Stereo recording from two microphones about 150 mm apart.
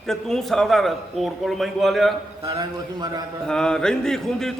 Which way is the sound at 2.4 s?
25° right (ahead or behind).